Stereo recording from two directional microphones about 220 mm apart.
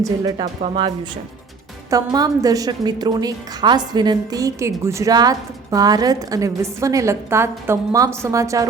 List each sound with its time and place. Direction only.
0.0 s a woman's voice: 15° right (ahead or behind)